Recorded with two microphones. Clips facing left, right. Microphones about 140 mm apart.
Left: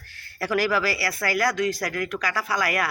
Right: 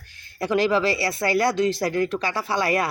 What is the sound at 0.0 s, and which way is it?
Speech, 20° right (ahead or behind).